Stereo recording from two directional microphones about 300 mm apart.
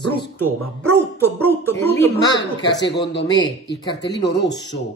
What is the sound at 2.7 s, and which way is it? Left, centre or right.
Speech, left.